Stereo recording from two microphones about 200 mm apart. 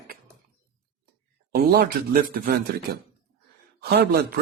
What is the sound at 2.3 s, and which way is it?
Speech, 50° right (ahead or behind).